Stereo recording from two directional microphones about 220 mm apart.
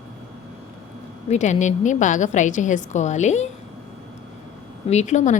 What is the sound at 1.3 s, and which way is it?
A woman's voice, 35° left (ahead or behind).